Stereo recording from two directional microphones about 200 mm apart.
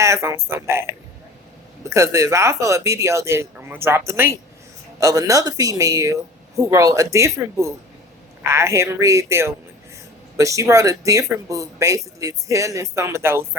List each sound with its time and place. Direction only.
0.0 s speech: 15° right (ahead or behind)